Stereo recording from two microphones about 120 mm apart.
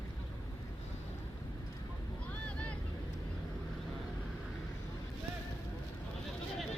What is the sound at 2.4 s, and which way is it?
Vehicle, 10° left (ahead or behind).